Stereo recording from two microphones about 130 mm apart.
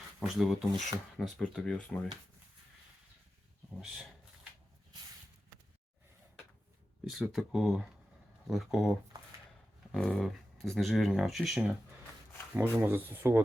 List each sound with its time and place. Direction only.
0.2 s speech: centre (ahead or behind)
3.8 s speech: centre (ahead or behind)
7.3 s speech: centre (ahead or behind)
12.5 s speech: 15° right (ahead or behind)